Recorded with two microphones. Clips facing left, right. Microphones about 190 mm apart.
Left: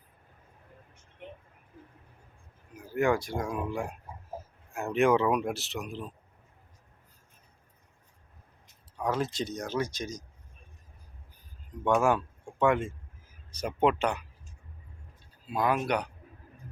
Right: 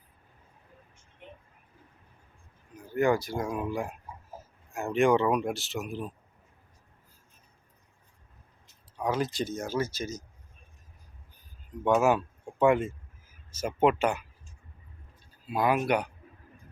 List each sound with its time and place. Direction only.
2.7 s speech: centre (ahead or behind)
9.0 s speech: centre (ahead or behind)
11.9 s speech: 5° right (ahead or behind)
15.4 s speech: 5° right (ahead or behind)